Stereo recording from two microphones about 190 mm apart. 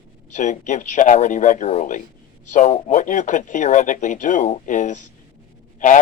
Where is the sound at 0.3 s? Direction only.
40° left (ahead or behind).